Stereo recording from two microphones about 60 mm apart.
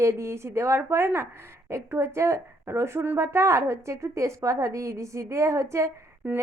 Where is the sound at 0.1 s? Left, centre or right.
Right.